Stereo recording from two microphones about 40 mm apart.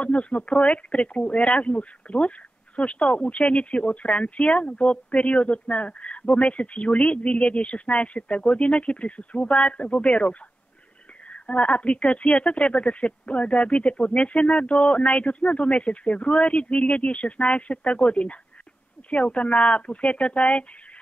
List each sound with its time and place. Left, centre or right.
0.0 s speech: left